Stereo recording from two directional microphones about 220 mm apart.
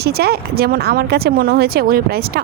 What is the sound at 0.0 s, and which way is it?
Speech, 45° right (ahead or behind).